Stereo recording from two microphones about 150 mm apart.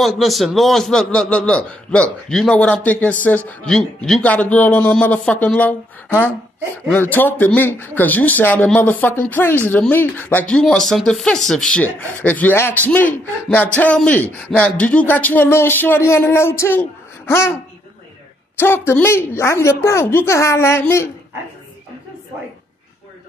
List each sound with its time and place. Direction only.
0.0 s a man's voice: centre (ahead or behind)
18.6 s speech: 15° left (ahead or behind)